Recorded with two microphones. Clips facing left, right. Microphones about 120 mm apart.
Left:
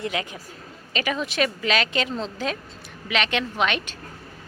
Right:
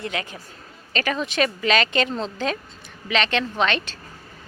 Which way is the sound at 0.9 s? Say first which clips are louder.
Right 2 dB; 5° left (ahead or behind).